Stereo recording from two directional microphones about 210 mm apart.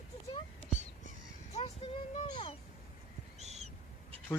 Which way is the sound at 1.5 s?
30° left (ahead or behind).